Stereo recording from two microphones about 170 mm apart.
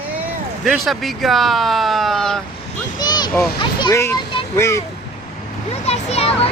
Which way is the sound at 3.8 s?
15° left (ahead or behind).